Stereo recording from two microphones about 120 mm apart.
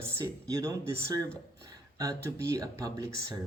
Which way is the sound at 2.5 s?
30° right (ahead or behind).